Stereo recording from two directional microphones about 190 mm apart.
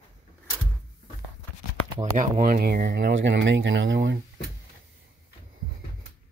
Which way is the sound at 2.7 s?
60° right (ahead or behind).